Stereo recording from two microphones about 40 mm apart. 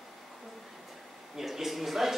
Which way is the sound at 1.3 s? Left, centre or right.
Centre.